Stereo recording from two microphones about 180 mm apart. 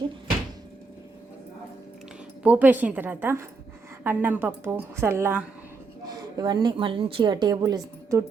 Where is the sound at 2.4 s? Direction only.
10° right (ahead or behind).